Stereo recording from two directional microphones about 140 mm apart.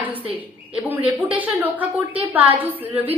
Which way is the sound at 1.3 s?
10° right (ahead or behind).